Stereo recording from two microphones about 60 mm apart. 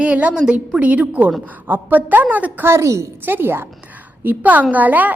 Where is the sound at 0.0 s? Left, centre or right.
Right.